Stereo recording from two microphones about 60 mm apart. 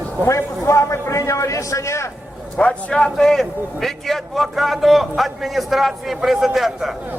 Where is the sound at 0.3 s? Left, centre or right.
Left.